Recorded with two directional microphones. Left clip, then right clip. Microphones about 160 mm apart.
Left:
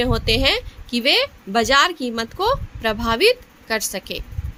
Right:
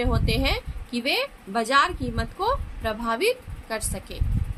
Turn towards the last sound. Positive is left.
turn(degrees=50)  # may be behind; listen again after turning